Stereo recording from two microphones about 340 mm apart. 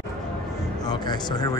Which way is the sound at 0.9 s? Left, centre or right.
Centre.